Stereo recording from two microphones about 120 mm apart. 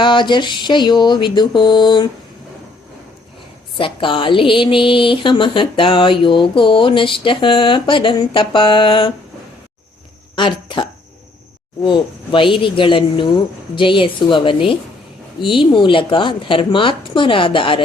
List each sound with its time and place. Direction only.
0.0 s speech: 40° left (ahead or behind)
3.8 s speech: 45° left (ahead or behind)
10.3 s speech: 40° left (ahead or behind)